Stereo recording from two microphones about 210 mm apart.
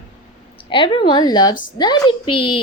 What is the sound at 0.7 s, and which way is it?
A woman's voice, 25° left (ahead or behind).